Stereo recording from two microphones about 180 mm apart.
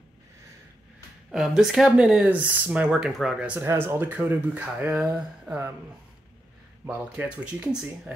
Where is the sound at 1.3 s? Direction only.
5° right (ahead or behind).